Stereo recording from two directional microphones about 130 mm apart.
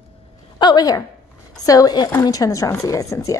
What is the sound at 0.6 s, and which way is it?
A woman's voice, 35° left (ahead or behind).